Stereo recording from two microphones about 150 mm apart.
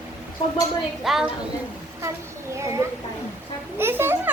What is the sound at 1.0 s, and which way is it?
Speech, centre (ahead or behind).